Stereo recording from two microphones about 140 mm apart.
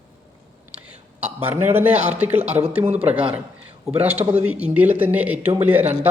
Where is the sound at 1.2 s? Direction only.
10° right (ahead or behind).